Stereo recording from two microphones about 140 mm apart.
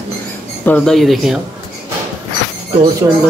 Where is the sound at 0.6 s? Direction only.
5° left (ahead or behind).